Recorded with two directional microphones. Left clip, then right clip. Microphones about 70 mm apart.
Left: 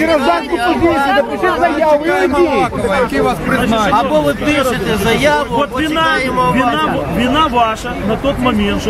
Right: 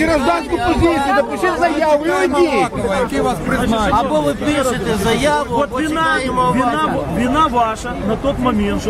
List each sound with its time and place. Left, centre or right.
0.9 s speech: centre
1.4 s speech: right
2.6 s speech: centre